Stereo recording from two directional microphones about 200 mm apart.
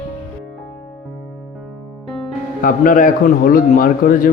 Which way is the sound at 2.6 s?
45° left (ahead or behind).